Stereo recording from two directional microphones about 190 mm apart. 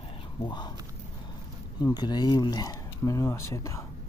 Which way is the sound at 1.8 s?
20° left (ahead or behind).